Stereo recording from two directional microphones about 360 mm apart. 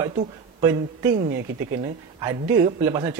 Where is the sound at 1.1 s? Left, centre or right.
Right.